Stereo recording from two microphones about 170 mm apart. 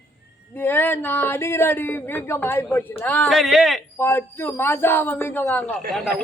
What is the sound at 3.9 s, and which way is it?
Speech, 15° left (ahead or behind).